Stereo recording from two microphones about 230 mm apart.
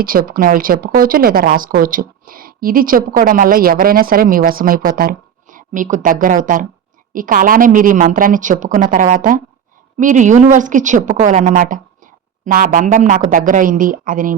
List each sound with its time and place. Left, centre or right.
0.0 s speech: right